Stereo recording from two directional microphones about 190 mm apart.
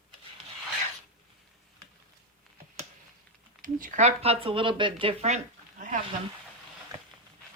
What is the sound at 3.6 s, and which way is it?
Speech, 45° right (ahead or behind).